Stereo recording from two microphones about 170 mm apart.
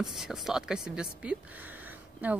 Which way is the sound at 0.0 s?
Centre (ahead or behind).